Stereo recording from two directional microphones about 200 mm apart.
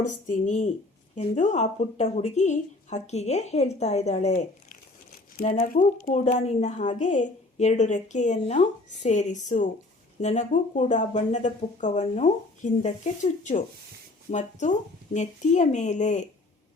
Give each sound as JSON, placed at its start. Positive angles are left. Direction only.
{"t": 0.0, "sound": "a woman's voice", "side_deg": 35}